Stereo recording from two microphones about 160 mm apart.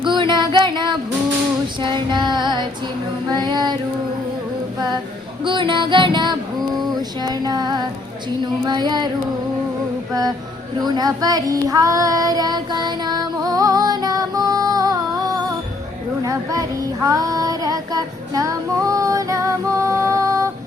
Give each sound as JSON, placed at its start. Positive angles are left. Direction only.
{"t": 0.0, "sound": "music", "side_deg": -30}
{"t": 3.3, "sound": "female singing", "side_deg": -25}
{"t": 5.5, "sound": "music", "side_deg": -30}
{"t": 6.7, "sound": "a sound", "side_deg": -25}
{"t": 10.1, "sound": "music", "side_deg": -25}
{"t": 10.8, "sound": "child singing", "side_deg": -25}